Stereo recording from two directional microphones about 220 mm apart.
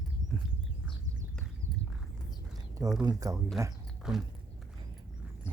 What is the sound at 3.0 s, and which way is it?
Speech, 15° right (ahead or behind).